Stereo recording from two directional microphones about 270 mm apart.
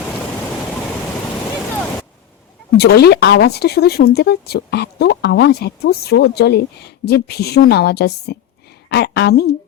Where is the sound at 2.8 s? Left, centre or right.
Left.